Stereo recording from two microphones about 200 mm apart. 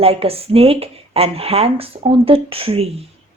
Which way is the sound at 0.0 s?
30° right (ahead or behind).